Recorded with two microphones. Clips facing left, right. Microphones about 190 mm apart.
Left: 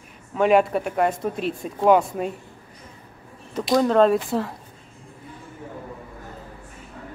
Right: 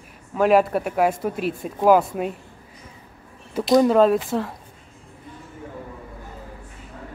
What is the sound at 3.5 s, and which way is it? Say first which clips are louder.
Speech: right 3 dB; 5° right (ahead or behind).